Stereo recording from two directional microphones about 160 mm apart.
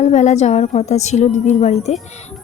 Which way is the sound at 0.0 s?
45° left (ahead or behind).